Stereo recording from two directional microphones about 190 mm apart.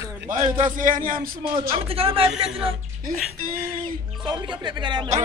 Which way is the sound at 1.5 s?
30° right (ahead or behind).